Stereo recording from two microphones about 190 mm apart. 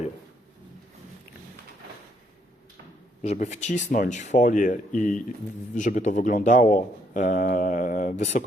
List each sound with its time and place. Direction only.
3.2 s speech: 40° left (ahead or behind)